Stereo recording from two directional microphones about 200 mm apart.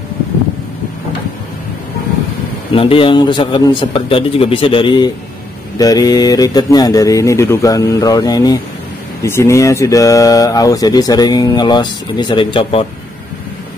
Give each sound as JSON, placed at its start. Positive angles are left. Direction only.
{"t": 2.7, "sound": "speech", "side_deg": 25}